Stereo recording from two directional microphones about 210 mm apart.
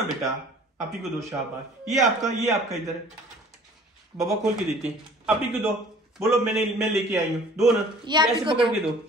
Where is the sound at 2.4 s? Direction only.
15° right (ahead or behind).